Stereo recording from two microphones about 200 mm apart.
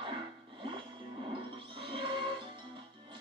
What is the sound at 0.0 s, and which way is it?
Music, 25° right (ahead or behind).